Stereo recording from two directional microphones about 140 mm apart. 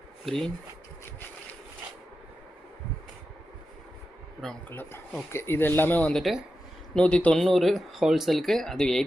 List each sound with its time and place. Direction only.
0.3 s speech: 5° left (ahead or behind)
4.7 s speech: 15° left (ahead or behind)